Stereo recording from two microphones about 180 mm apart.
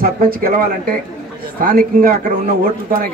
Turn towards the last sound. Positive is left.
turn(degrees=-50)  # may be behind; listen again after turning